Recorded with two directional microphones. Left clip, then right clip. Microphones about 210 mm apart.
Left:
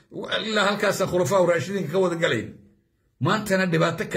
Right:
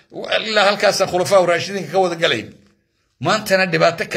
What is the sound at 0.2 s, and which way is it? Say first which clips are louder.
A man's voice: right 7 dB; 20° left (ahead or behind).